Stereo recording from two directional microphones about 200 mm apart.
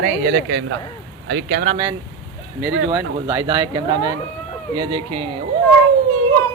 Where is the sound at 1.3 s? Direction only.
55° right (ahead or behind).